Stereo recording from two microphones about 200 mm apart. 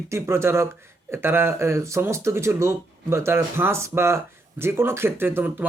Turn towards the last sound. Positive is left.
turn(degrees=-10)  # may be behind; listen again after turning